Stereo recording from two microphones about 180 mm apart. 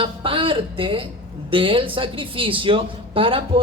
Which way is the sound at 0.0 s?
30° right (ahead or behind).